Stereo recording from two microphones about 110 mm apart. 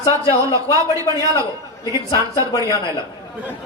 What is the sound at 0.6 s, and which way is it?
Speech, 25° left (ahead or behind).